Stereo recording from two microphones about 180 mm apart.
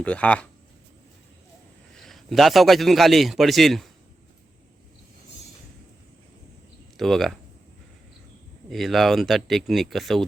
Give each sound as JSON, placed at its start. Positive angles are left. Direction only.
{"t": 0.0, "sound": "speech", "side_deg": 5}
{"t": 2.0, "sound": "a man's voice", "side_deg": 0}
{"t": 6.9, "sound": "speech", "side_deg": 0}
{"t": 8.7, "sound": "a man's voice", "side_deg": 0}